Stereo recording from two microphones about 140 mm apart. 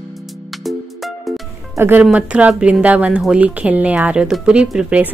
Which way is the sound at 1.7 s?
15° right (ahead or behind).